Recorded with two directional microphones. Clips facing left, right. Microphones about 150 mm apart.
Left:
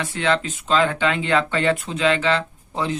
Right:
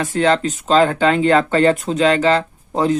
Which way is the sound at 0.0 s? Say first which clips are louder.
Right 6 dB; 40° right (ahead or behind).